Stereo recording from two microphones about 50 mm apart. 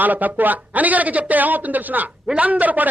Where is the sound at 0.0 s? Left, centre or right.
Right.